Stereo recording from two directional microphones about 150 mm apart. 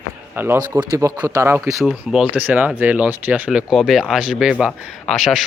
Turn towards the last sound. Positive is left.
turn(degrees=0)  # may be behind; listen again after turning